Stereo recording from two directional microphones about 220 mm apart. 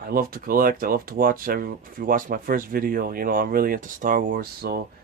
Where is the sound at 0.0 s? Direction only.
40° right (ahead or behind).